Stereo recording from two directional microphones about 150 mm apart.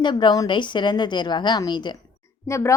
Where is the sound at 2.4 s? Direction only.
20° left (ahead or behind).